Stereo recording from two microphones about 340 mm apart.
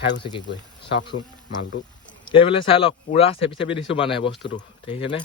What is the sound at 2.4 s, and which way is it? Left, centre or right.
Speech, centre.